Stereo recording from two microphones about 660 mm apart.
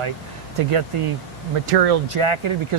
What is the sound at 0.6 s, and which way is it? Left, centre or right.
Speech, right.